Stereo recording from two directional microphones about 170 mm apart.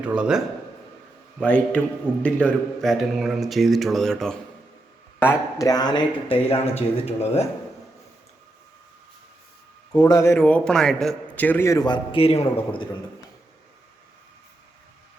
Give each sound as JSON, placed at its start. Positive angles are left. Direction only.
{"t": 0.0, "sound": "speech", "side_deg": -5}
{"t": 1.4, "sound": "a man's voice", "side_deg": 10}
{"t": 5.2, "sound": "speech", "side_deg": 20}
{"t": 10.0, "sound": "a man's voice", "side_deg": 20}